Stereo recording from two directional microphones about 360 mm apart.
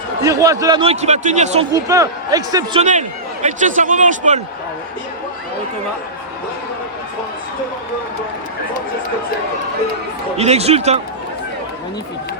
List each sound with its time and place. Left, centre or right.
0.2 s a man's voice: centre
10.3 s a man's voice: centre